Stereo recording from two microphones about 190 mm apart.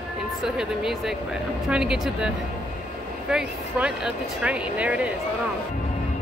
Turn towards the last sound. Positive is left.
turn(degrees=-5)  # may be behind; listen again after turning